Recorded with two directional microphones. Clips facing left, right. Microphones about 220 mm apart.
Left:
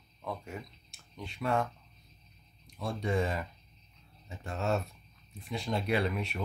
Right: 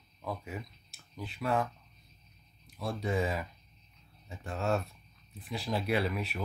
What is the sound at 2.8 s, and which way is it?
Speech, centre (ahead or behind).